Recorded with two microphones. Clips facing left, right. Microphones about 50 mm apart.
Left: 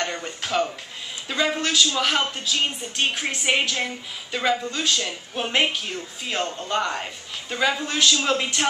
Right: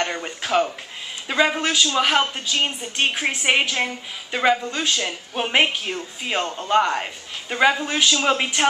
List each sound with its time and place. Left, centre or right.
0.0 s a woman's voice: centre